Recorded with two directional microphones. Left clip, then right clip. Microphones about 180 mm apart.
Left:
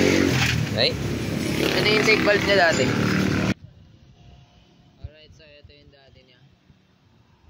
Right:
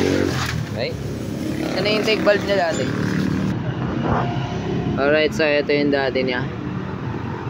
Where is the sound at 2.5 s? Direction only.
5° right (ahead or behind).